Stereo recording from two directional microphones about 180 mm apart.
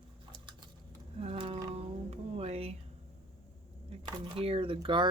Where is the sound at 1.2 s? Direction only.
30° right (ahead or behind).